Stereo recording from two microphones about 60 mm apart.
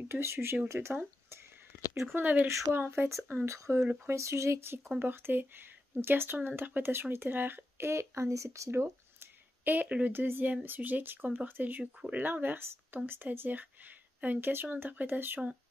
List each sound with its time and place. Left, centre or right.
0.1 s speech: right
4.9 s speech: right
8.6 s a sound: right
9.8 s speech: right
10.1 s speech: right